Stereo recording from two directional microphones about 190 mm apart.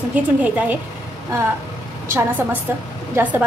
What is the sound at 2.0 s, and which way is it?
A woman's voice, 15° right (ahead or behind).